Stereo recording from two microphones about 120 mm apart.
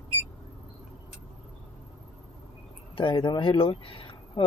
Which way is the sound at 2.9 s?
45° left (ahead or behind).